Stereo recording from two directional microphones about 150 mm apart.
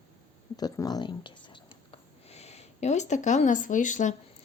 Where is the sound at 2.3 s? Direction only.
45° left (ahead or behind).